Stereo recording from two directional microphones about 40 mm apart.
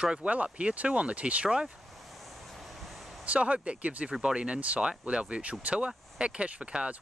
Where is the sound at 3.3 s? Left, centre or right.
Right.